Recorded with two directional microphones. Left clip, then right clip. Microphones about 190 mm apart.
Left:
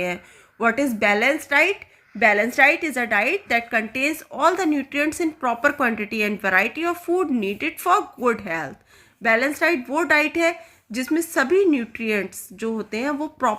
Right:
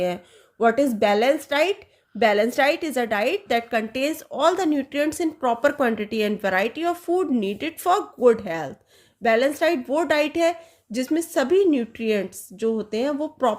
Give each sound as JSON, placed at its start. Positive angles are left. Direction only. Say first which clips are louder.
{"t": 0.6, "sound": "a woman's voice", "louder": "right 1 dB", "side_deg": -20}